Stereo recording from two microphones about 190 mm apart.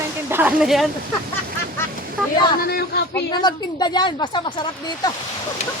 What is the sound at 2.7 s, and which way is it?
Speech, 55° left (ahead or behind).